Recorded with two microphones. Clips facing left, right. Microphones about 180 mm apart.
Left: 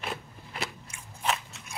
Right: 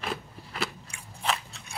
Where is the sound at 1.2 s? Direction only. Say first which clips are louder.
Even; 35° right (ahead or behind).